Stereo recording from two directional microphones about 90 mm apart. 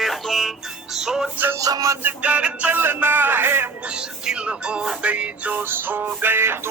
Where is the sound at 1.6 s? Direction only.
40° right (ahead or behind).